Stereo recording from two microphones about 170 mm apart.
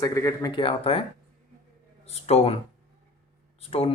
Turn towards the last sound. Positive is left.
turn(degrees=35)  # may be behind; listen again after turning